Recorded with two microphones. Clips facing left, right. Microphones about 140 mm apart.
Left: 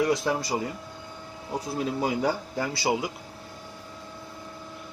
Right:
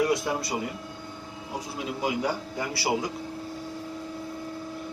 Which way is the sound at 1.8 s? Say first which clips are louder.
Left 2 dB; 40° left (ahead or behind).